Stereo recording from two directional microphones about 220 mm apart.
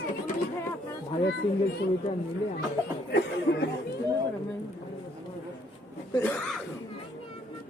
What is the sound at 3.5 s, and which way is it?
Speech, 45° left (ahead or behind).